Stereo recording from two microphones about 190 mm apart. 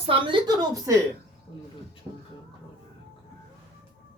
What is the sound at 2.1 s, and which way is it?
Music, 25° right (ahead or behind).